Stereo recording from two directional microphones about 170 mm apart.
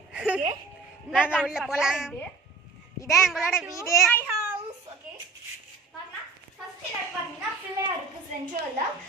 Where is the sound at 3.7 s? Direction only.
15° left (ahead or behind).